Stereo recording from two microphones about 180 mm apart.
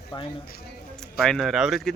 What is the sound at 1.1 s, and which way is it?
Speech, centre (ahead or behind).